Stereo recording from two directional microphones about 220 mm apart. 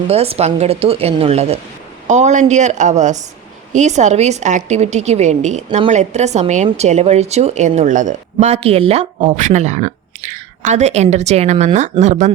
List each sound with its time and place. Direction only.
0.1 s a woman's voice: 30° right (ahead or behind)